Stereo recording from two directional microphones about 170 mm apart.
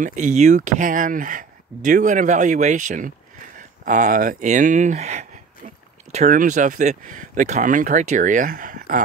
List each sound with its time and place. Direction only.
0.0 s speech: 45° right (ahead or behind)